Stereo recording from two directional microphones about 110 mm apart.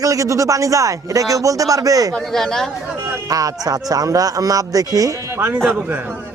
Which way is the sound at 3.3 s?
35° right (ahead or behind).